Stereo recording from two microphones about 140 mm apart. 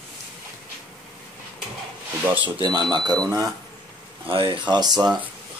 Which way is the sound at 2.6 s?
30° right (ahead or behind).